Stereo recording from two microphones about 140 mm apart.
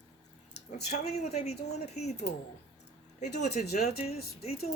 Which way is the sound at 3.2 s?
55° left (ahead or behind).